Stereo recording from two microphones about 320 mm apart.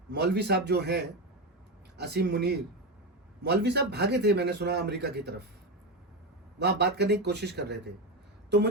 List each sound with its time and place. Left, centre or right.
0.1 s a man's voice: right
6.6 s a man's voice: right